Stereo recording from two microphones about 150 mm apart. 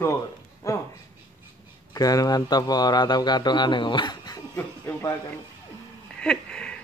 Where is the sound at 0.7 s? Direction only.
20° left (ahead or behind).